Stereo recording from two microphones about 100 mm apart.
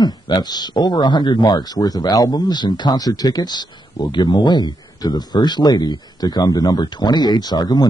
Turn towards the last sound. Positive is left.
turn(degrees=40)  # may be behind; listen again after turning